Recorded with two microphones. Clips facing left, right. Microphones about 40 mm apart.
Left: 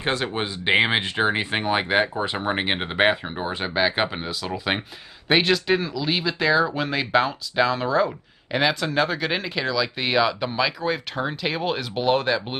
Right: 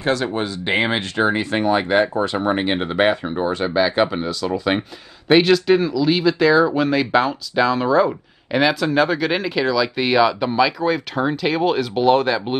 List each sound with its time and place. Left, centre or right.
0.0 s speech: left; by 12.5 s centre